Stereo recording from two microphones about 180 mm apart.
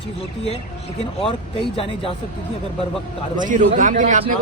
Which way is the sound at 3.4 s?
45° right (ahead or behind).